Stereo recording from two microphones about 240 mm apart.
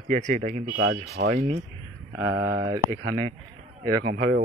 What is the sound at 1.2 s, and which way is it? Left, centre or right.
Speech, right.